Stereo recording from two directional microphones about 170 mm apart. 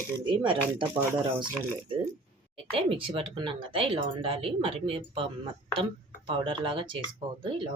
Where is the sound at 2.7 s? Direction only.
35° right (ahead or behind).